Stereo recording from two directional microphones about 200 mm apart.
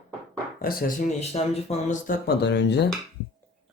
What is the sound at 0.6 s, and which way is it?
Speech, 45° left (ahead or behind).